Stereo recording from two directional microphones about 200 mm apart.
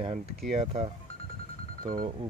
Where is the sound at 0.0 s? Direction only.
30° right (ahead or behind).